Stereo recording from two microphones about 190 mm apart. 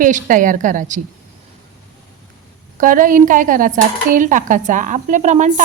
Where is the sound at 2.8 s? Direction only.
45° right (ahead or behind).